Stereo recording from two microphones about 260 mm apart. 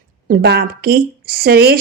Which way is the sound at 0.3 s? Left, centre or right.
Right.